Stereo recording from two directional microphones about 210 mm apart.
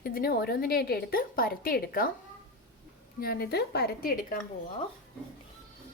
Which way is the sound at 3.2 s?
45° left (ahead or behind).